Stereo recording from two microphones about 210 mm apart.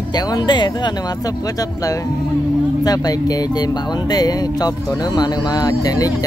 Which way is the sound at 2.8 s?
20° left (ahead or behind).